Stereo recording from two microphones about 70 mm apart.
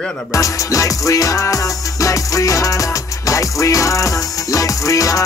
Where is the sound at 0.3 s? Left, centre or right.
Left.